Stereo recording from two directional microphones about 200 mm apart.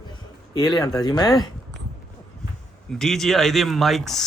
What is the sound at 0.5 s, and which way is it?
Speech, 20° left (ahead or behind).